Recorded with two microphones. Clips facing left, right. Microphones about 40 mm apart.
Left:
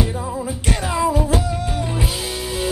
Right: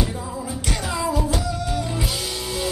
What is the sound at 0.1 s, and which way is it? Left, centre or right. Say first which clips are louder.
Music: left 4 dB; left.